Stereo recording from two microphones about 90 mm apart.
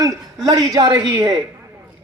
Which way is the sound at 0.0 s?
40° right (ahead or behind).